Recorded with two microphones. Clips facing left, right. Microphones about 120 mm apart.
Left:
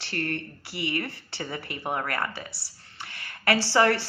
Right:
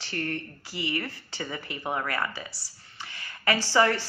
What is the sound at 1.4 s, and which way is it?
Speech, 35° left (ahead or behind).